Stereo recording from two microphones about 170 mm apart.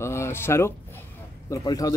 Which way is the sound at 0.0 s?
15° left (ahead or behind).